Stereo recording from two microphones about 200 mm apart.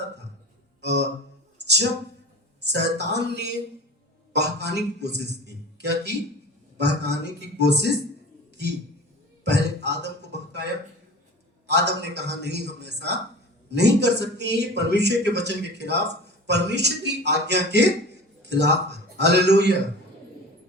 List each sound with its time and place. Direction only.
0.8 s a sound: 60° right (ahead or behind)
2.6 s speech: 60° right (ahead or behind)
9.4 s speech: 60° right (ahead or behind)
11.7 s speech: 60° right (ahead or behind)